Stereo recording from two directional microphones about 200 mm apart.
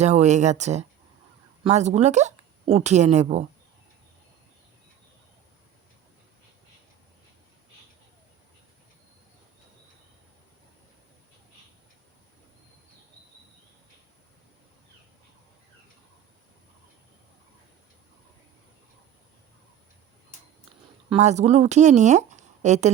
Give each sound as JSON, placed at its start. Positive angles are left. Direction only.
{"t": 0.0, "sound": "speech", "side_deg": -35}
{"t": 21.1, "sound": "speech", "side_deg": -35}